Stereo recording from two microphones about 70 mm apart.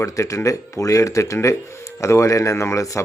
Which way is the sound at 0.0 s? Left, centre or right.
Left.